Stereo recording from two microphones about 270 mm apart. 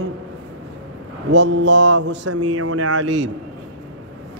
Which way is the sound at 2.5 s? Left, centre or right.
Right.